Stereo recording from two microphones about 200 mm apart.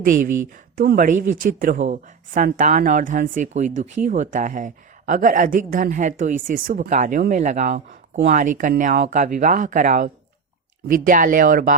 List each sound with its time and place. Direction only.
0.8 s a woman's voice: 45° right (ahead or behind)